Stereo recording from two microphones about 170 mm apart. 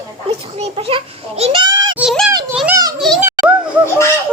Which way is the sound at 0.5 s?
35° right (ahead or behind).